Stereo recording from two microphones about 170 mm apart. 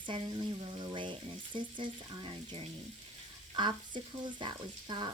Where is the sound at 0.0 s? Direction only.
30° right (ahead or behind).